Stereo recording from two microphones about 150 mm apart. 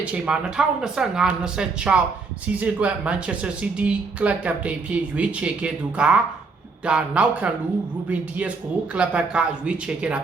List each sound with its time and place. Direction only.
0.0 s speech: 5° right (ahead or behind)